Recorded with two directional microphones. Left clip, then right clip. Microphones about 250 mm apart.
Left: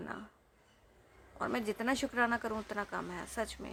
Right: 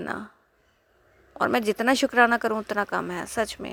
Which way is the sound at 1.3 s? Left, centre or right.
Right.